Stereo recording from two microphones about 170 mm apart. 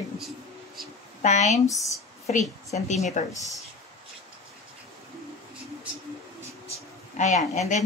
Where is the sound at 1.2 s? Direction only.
45° left (ahead or behind).